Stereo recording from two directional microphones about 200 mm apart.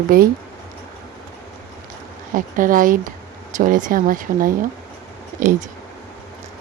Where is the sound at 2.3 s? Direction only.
40° right (ahead or behind).